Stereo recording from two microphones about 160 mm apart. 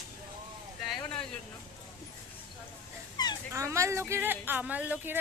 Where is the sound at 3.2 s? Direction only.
25° left (ahead or behind).